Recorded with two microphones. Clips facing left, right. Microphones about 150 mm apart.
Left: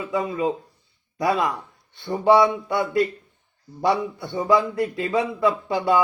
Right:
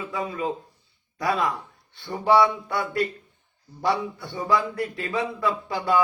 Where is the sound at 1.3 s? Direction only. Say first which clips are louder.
Left 1 dB; centre (ahead or behind).